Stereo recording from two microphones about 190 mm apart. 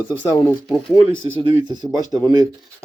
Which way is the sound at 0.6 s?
Centre (ahead or behind).